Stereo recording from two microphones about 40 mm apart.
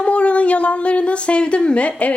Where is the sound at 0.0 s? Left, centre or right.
Left.